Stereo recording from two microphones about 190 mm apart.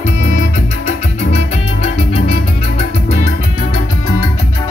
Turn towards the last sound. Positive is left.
turn(degrees=40)  # may be behind; listen again after turning